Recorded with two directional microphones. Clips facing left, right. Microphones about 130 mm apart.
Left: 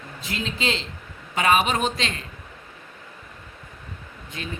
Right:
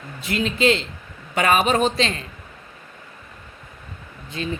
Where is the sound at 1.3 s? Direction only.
50° right (ahead or behind).